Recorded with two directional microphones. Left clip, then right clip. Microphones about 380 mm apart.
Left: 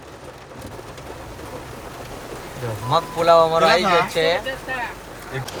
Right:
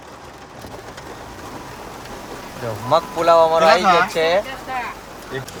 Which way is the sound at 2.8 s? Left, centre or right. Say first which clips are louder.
Right 1 dB; centre.